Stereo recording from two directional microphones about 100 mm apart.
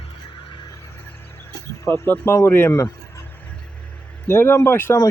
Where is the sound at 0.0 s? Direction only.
60° left (ahead or behind).